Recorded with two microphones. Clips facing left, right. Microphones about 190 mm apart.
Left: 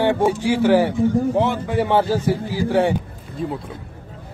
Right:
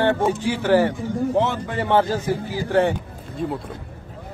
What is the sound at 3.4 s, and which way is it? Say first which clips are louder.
Speech: even; centre (ahead or behind).